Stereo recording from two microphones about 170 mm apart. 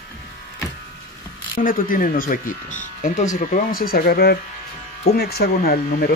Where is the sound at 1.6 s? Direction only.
55° left (ahead or behind).